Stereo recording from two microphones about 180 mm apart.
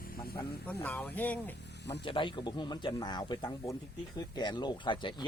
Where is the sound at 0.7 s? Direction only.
5° left (ahead or behind).